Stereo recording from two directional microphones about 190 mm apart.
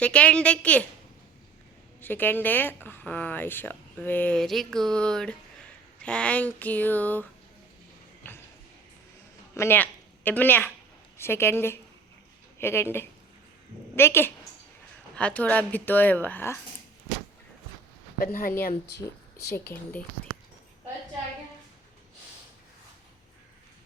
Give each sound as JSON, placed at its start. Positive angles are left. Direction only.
{"t": 0.0, "sound": "speech", "side_deg": 5}
{"t": 2.0, "sound": "speech", "side_deg": 10}
{"t": 8.2, "sound": "a sound", "side_deg": 10}
{"t": 9.6, "sound": "a woman's voice", "side_deg": 10}
{"t": 18.2, "sound": "speech", "side_deg": 45}
{"t": 18.6, "sound": "speech", "side_deg": 60}
{"t": 19.5, "sound": "speech", "side_deg": 10}